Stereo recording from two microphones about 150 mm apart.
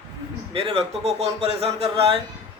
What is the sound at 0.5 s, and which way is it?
Speech, 40° right (ahead or behind).